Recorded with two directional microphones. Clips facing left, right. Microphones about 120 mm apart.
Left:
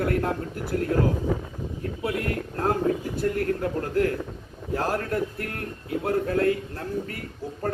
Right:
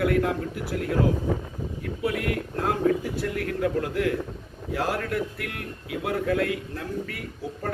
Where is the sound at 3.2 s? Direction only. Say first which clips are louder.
Left 2 dB; 40° left (ahead or behind).